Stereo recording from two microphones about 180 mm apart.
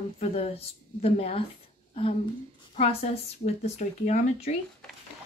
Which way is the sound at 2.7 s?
35° left (ahead or behind).